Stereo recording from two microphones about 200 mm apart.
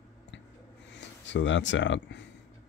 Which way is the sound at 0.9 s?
65° left (ahead or behind).